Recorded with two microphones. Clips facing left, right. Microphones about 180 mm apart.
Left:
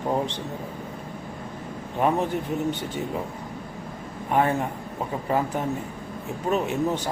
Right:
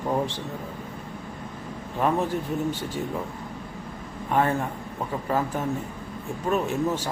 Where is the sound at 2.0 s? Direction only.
20° left (ahead or behind).